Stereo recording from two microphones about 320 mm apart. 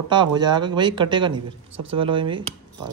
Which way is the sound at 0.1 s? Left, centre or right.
Centre.